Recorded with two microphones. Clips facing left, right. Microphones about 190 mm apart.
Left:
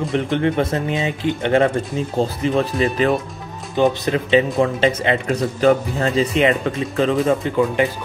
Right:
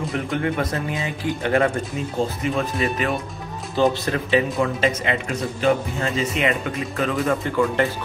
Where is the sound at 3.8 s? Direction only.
20° left (ahead or behind).